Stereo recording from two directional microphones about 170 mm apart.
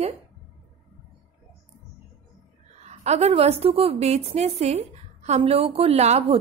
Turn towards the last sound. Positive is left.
turn(degrees=-40)  # may be behind; listen again after turning